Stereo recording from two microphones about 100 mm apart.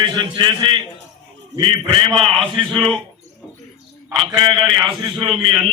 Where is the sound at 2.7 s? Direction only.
5° left (ahead or behind).